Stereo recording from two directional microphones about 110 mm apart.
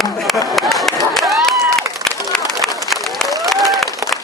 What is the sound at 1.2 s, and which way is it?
Run, centre (ahead or behind).